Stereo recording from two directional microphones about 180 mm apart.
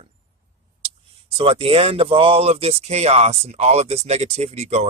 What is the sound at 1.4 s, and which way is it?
Speech, 30° right (ahead or behind).